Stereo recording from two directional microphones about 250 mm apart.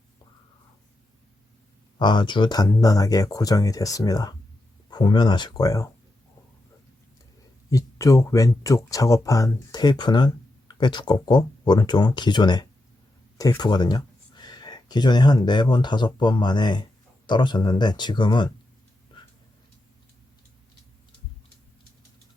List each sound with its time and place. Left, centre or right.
2.0 s speech: centre
7.7 s speech: centre